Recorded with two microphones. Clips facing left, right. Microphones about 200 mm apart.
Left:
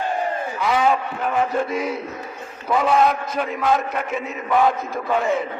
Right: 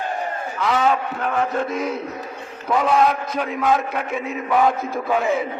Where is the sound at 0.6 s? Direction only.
5° left (ahead or behind).